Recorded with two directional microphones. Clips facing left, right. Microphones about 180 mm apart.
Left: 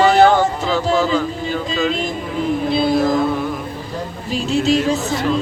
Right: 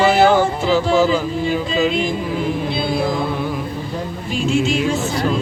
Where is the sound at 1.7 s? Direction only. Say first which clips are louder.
Right 1 dB; 5° right (ahead or behind).